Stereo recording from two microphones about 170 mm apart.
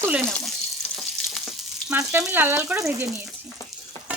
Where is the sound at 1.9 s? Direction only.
10° right (ahead or behind).